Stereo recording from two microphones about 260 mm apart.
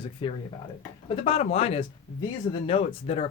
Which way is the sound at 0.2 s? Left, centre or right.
Centre.